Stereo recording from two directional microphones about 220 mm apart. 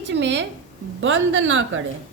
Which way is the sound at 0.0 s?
55° right (ahead or behind).